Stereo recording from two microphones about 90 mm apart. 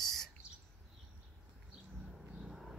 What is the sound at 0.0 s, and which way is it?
Owl, 5° left (ahead or behind).